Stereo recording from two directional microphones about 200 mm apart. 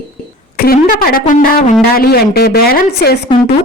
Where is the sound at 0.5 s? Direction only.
50° left (ahead or behind).